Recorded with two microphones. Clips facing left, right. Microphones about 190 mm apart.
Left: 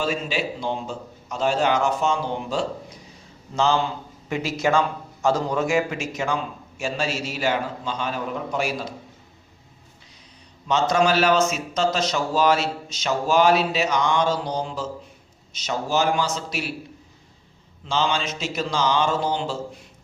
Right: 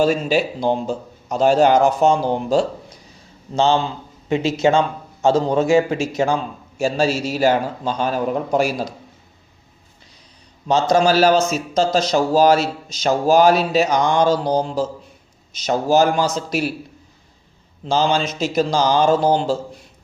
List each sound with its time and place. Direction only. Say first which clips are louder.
0.0 s a man's voice: right 8 dB; 40° right (ahead or behind)
10.7 s a man's voice: right 4 dB; 35° right (ahead or behind)
17.8 s a man's voice: right 6 dB; 40° right (ahead or behind)